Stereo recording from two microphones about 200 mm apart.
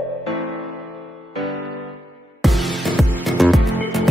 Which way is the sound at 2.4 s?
Centre (ahead or behind).